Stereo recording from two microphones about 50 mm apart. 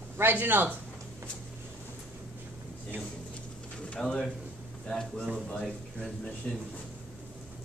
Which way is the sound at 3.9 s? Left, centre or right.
Centre.